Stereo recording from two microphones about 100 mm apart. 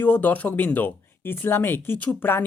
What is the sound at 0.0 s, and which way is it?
Speech, 15° left (ahead or behind).